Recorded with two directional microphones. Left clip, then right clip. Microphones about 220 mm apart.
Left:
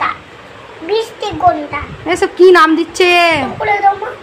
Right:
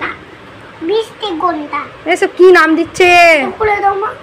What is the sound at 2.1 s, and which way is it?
A man's voice, centre (ahead or behind).